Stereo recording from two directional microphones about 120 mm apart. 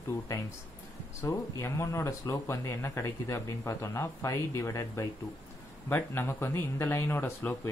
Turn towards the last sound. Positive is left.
turn(degrees=15)  # may be behind; listen again after turning